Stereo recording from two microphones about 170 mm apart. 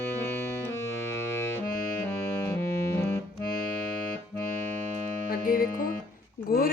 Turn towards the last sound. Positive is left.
turn(degrees=60)  # may be behind; listen again after turning